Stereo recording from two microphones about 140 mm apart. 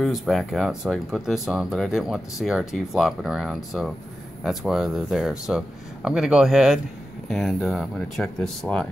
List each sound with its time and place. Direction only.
0.0 s speech: centre (ahead or behind)